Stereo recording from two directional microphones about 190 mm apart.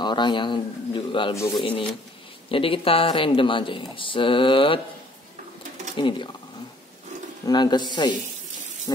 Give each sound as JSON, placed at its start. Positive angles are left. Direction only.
{"t": 0.0, "sound": "speech", "side_deg": 25}
{"t": 5.9, "sound": "speech", "side_deg": 25}
{"t": 7.4, "sound": "speech", "side_deg": 20}
{"t": 8.9, "sound": "rain", "side_deg": 15}